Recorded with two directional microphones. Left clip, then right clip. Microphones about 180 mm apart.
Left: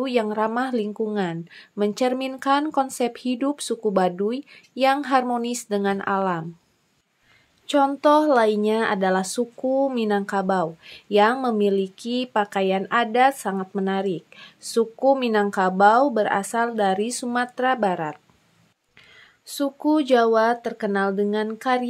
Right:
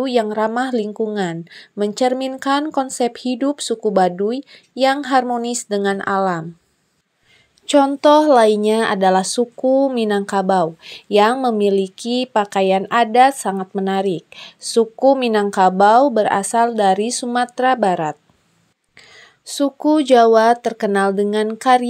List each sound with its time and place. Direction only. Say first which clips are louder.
0.0 s a woman's voice: right 5 dB; 15° right (ahead or behind)
7.6 s speech: right 6 dB; 30° right (ahead or behind)
19.1 s speech: right 7 dB; 30° right (ahead or behind)